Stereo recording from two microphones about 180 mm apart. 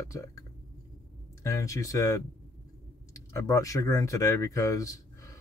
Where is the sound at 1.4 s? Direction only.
15° left (ahead or behind).